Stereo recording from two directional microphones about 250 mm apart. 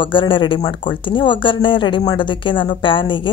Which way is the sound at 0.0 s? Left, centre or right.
Centre.